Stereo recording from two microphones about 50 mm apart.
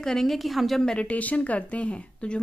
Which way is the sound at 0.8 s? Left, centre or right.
Left.